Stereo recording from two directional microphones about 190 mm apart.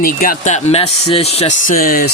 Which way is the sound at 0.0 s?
45° left (ahead or behind).